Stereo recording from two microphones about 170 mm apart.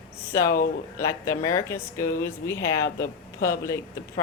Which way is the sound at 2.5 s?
15° left (ahead or behind).